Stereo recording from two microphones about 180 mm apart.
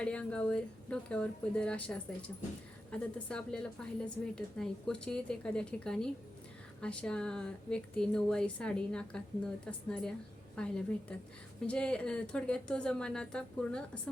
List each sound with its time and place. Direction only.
0.0 s a woman's voice: 5° left (ahead or behind)